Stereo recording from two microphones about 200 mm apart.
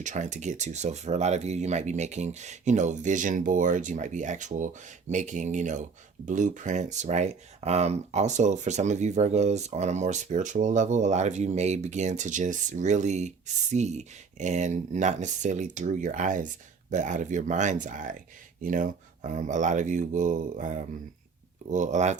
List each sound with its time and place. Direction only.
0.0 s speech: 35° right (ahead or behind)